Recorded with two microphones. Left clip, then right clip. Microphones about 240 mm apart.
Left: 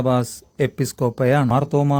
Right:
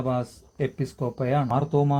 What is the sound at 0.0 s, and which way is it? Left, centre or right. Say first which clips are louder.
Speech: left 7 dB; left.